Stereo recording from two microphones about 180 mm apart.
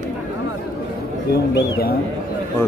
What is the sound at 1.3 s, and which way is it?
Speech, 60° left (ahead or behind).